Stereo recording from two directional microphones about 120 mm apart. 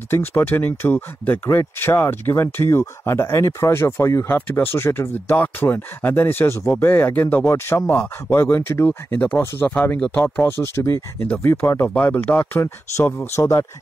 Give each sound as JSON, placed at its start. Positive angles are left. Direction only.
{"t": 0.1, "sound": "speech", "side_deg": 20}
{"t": 10.2, "sound": "speech", "side_deg": 15}